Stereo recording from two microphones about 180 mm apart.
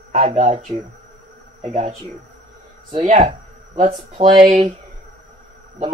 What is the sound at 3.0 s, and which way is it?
Speech, 40° right (ahead or behind).